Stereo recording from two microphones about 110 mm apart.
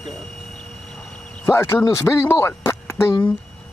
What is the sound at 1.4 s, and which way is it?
Speech, 25° left (ahead or behind).